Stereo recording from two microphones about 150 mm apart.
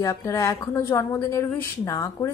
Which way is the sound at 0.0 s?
20° left (ahead or behind).